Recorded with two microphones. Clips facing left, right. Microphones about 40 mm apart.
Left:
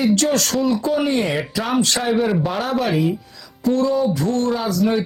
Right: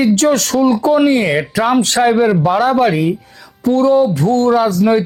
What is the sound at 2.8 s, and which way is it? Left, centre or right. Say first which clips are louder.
Speech: right 6 dB; right.